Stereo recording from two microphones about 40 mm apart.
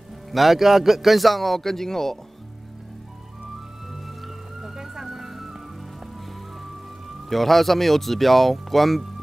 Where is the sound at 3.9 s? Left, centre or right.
Centre.